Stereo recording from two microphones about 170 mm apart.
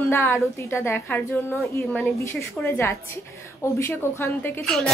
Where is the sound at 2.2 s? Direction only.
15° left (ahead or behind).